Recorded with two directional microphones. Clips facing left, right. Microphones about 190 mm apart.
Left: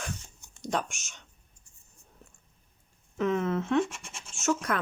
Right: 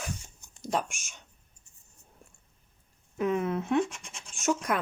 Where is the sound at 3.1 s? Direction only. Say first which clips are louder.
Left 1 dB; 10° right (ahead or behind).